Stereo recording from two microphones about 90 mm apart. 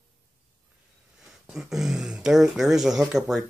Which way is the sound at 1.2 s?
5° right (ahead or behind).